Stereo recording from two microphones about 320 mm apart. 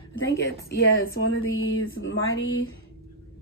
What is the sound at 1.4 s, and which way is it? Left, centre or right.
Speech, left.